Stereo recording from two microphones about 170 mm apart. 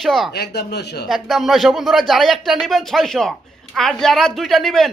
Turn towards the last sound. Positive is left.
turn(degrees=0)  # may be behind; listen again after turning